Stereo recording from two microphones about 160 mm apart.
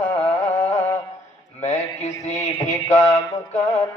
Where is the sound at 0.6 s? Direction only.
40° left (ahead or behind).